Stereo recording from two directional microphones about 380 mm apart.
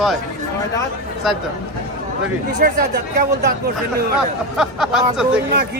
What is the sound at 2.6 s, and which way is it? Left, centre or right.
Speech, right.